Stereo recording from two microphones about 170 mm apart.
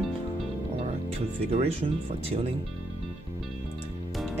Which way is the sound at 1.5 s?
35° right (ahead or behind).